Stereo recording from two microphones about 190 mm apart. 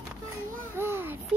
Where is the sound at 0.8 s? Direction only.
10° right (ahead or behind).